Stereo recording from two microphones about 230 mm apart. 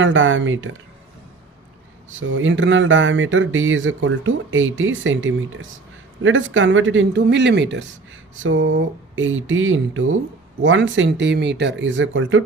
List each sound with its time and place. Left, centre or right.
0.0 s speech: right
2.1 s speech: right